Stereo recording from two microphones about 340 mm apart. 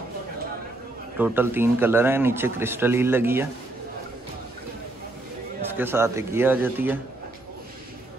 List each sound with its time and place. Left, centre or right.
1.1 s a man's voice: centre
5.8 s a man's voice: centre